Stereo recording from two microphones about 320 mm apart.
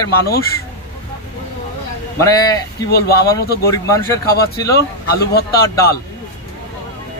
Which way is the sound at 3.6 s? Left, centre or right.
Centre.